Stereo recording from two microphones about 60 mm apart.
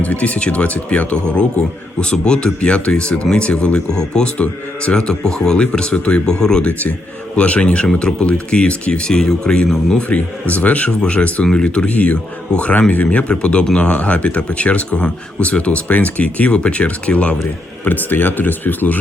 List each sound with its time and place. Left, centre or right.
0.0 s speech: left
6.7 s speech: left; by 10.0 s centre
10.1 s speech: left
17.8 s speech: left